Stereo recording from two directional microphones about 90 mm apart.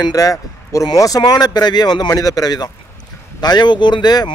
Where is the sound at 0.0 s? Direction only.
40° left (ahead or behind).